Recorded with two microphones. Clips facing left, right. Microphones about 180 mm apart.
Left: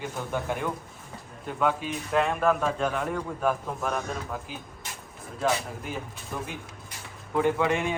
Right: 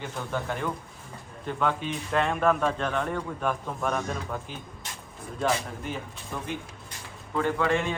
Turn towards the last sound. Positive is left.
turn(degrees=15)  # may be behind; listen again after turning